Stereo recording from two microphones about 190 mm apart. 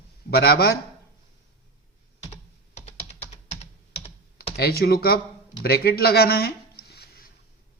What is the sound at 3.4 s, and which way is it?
Computer keyboard, 35° left (ahead or behind).